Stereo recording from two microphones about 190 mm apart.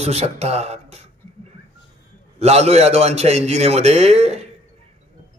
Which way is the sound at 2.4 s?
35° right (ahead or behind).